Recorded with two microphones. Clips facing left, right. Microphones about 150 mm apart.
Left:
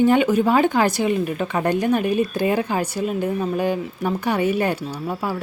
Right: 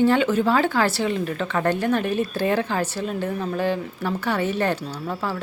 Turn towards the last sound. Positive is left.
turn(degrees=15)  # may be behind; listen again after turning